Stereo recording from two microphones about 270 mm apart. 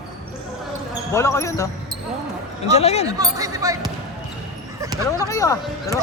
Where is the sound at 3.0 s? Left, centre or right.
Centre.